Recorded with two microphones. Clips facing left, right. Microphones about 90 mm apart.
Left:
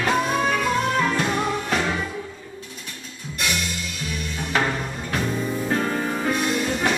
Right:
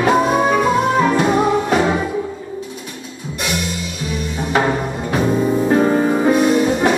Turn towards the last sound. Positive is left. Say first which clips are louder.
# right 8 dB
turn(degrees=-20)  # may be behind; listen again after turning